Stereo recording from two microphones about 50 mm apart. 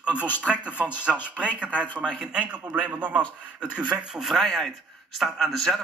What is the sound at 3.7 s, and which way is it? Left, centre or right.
Speech, centre.